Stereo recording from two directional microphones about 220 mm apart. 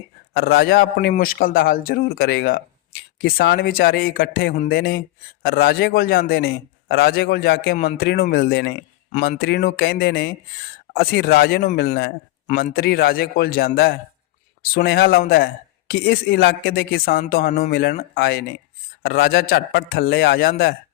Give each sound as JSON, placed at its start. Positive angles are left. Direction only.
{"t": 0.3, "sound": "a man's voice", "side_deg": 45}